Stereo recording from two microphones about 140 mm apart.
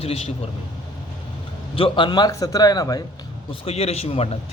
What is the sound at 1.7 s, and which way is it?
A man's voice, 35° left (ahead or behind).